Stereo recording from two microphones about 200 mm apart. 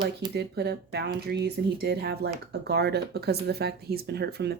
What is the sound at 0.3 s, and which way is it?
Speech, 55° right (ahead or behind).